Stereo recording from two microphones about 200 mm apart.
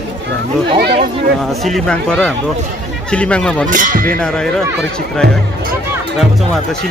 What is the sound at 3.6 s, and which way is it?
Speech, 40° right (ahead or behind).